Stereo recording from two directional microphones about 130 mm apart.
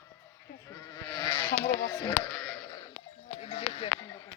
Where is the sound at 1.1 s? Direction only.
35° left (ahead or behind).